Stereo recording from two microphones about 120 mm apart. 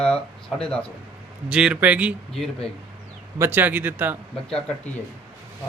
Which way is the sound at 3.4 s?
15° right (ahead or behind).